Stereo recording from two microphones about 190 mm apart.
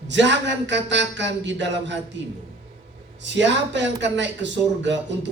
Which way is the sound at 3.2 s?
70° right (ahead or behind).